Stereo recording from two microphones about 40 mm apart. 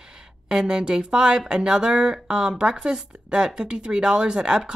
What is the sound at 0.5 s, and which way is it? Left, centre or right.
Speech, right.